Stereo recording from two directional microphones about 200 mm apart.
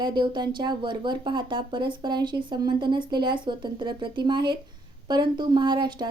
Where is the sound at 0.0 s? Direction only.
20° right (ahead or behind).